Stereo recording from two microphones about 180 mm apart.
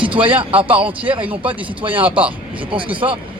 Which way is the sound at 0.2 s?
30° right (ahead or behind).